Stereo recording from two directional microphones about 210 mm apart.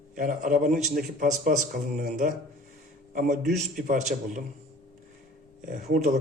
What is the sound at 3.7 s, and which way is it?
Speech, 40° right (ahead or behind).